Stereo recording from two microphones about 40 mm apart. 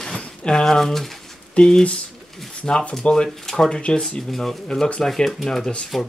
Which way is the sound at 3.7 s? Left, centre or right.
Left.